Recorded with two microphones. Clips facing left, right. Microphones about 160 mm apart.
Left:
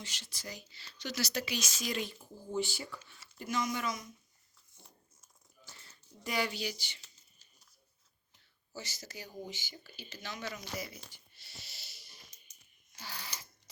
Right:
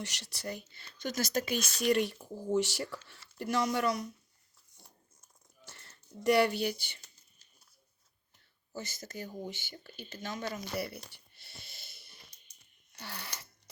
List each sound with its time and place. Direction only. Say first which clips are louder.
0.0 s speech: right 7 dB; 70° right (ahead or behind)
3.3 s speech: right 4 dB; 65° right (ahead or behind)
5.7 s speech: right 10 dB; 70° right (ahead or behind); by 7.1 s 55° right (ahead or behind)
8.7 s speech: right 4 dB; 50° right (ahead or behind)
10.8 s a sound: right 6 dB; 65° right (ahead or behind)